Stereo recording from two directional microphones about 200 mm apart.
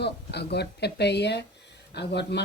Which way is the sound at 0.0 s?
55° left (ahead or behind).